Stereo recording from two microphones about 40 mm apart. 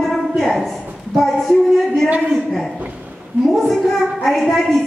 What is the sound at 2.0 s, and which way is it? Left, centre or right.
Speech, right.